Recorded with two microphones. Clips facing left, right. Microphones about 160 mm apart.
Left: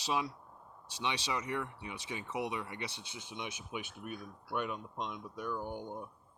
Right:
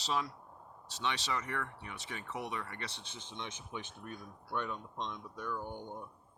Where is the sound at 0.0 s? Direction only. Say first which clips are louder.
Left 1 dB; 10° left (ahead or behind).